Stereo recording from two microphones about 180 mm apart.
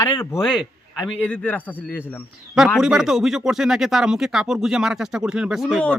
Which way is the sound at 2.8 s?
5° right (ahead or behind).